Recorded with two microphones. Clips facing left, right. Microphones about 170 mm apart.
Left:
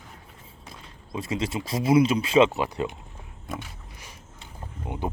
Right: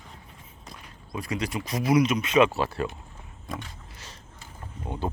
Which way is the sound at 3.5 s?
10° left (ahead or behind).